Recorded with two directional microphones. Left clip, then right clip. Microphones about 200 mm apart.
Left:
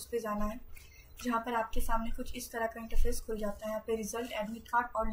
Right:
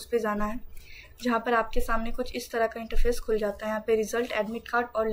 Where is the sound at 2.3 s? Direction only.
10° right (ahead or behind).